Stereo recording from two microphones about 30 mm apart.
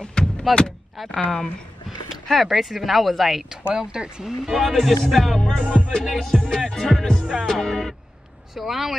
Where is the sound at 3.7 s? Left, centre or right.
Right.